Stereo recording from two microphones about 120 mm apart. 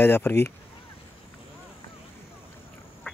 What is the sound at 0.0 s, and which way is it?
Speech, 20° left (ahead or behind).